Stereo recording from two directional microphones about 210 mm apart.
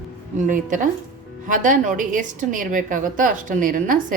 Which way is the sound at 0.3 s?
40° right (ahead or behind).